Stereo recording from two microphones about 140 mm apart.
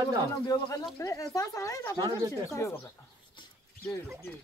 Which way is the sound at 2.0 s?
25° right (ahead or behind).